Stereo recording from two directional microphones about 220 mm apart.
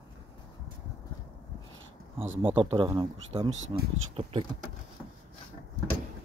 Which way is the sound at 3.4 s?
60° right (ahead or behind).